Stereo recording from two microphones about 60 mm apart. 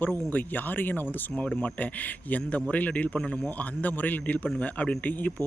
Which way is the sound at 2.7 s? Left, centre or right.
Left.